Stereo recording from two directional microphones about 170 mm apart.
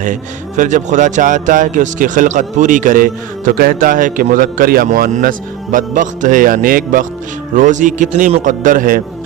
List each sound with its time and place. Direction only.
0.0 s a man's voice: 50° right (ahead or behind)